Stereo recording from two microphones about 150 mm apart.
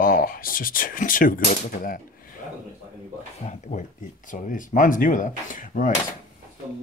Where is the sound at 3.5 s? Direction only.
55° left (ahead or behind).